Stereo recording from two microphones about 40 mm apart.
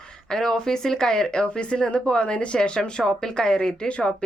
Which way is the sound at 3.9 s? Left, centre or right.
Left.